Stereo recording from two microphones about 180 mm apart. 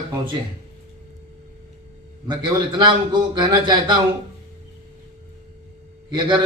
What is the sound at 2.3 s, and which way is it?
A man's voice, 25° right (ahead or behind).